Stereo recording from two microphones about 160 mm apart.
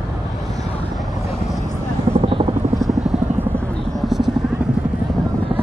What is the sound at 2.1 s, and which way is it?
Helicopter, 35° right (ahead or behind).